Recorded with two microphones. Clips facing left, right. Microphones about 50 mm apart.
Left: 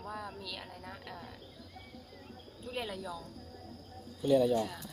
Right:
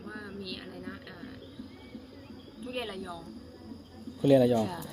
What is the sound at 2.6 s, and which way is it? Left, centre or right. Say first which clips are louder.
Speech: right 2 dB; centre.